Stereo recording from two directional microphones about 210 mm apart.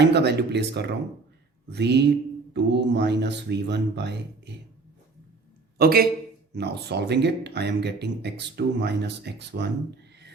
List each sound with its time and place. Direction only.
0.0 s speech: 55° right (ahead or behind)
5.7 s a man's voice: 45° right (ahead or behind)